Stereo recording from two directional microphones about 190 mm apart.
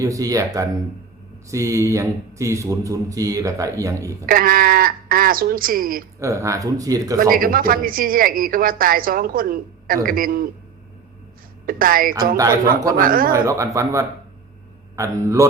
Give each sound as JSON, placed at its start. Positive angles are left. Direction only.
{"t": 0.0, "sound": "speech", "side_deg": -20}
{"t": 4.3, "sound": "speech", "side_deg": -50}
{"t": 6.1, "sound": "speech", "side_deg": -15}
{"t": 7.2, "sound": "a woman's voice", "side_deg": -50}
{"t": 11.6, "sound": "a woman's voice", "side_deg": -50}
{"t": 13.3, "sound": "speech", "side_deg": -15}